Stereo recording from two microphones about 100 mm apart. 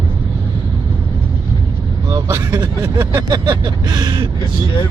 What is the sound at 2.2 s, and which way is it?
Speech, 30° right (ahead or behind).